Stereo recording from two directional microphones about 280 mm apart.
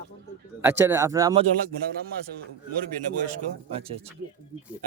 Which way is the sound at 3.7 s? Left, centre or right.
Right.